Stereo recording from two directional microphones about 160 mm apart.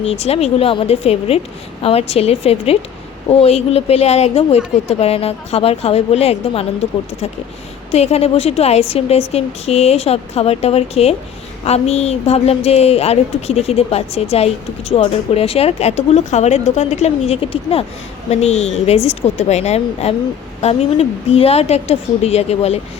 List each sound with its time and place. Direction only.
0.0 s a woman's voice: 40° left (ahead or behind)
7.9 s a woman's voice: 40° left (ahead or behind)